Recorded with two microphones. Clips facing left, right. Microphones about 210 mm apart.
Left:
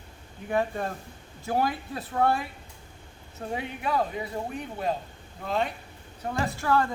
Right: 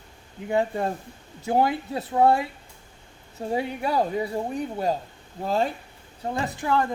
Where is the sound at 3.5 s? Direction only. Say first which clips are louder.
Right 5 dB; 35° right (ahead or behind).